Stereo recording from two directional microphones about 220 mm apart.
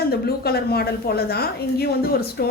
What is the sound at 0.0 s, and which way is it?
A woman's voice, 45° left (ahead or behind).